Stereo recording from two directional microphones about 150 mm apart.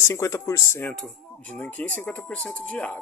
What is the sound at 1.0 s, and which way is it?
Speech, 5° left (ahead or behind).